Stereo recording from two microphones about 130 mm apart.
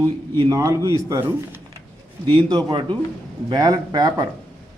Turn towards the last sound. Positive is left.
turn(degrees=-30)  # may be behind; listen again after turning